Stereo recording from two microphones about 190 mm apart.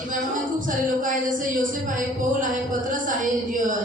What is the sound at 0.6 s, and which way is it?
Speech, 45° right (ahead or behind).